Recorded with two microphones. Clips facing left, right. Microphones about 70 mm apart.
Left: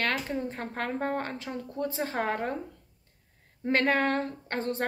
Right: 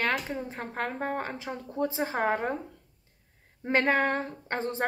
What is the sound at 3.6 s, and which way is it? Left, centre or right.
A woman's voice, centre.